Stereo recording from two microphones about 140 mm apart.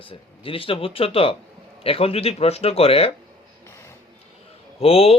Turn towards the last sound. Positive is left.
turn(degrees=45)  # may be behind; listen again after turning